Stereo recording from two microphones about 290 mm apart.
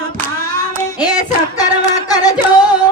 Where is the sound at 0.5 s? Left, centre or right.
Centre.